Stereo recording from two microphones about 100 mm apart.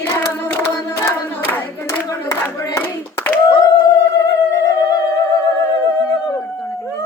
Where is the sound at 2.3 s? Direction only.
20° left (ahead or behind).